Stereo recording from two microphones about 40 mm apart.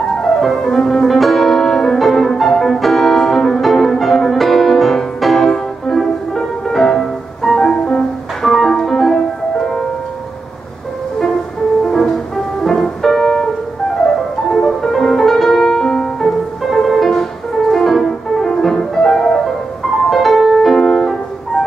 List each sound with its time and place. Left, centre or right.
0.6 s music: centre
8.4 s music: centre
11.8 s music: centre
14.5 s music: centre